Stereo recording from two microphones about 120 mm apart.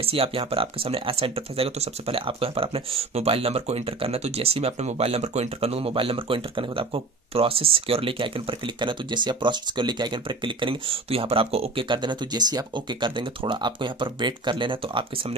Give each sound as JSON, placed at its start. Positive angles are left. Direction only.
{"t": 0.0, "sound": "speech", "side_deg": -50}